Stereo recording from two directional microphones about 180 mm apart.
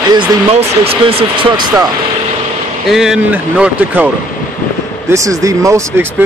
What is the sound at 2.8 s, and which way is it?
Speech, centre (ahead or behind).